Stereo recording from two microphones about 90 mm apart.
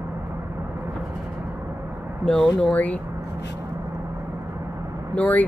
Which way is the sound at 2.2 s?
5° left (ahead or behind).